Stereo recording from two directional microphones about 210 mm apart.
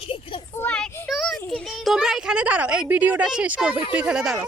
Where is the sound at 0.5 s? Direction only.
5° left (ahead or behind).